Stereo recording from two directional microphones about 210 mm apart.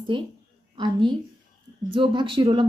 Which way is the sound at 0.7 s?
20° right (ahead or behind).